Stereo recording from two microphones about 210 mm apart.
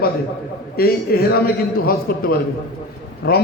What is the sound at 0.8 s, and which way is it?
Speech, 45° left (ahead or behind).